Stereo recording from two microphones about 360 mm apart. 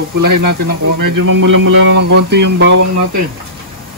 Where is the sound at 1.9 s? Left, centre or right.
Right.